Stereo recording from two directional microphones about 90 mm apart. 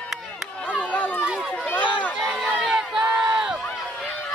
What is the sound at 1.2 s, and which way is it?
Run, 10° right (ahead or behind).